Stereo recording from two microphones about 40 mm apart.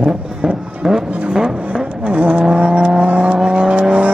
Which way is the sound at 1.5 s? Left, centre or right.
Right.